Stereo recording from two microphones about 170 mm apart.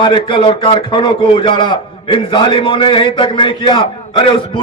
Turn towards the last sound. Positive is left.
turn(degrees=30)  # may be behind; listen again after turning